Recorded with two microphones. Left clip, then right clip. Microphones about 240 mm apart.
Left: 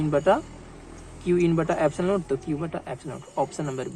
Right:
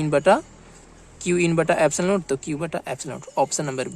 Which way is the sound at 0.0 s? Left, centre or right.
Right.